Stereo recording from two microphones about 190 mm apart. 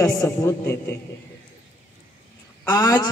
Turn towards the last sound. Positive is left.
turn(degrees=20)  # may be behind; listen again after turning